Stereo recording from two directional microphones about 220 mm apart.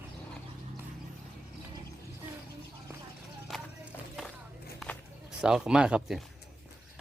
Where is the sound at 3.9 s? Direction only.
10° left (ahead or behind).